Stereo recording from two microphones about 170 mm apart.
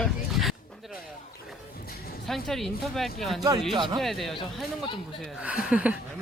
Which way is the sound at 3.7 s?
30° right (ahead or behind).